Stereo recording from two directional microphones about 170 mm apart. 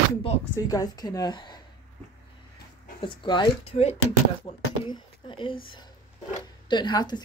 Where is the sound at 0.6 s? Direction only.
20° left (ahead or behind).